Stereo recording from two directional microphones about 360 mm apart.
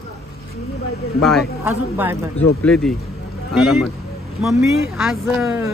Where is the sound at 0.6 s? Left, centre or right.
Left.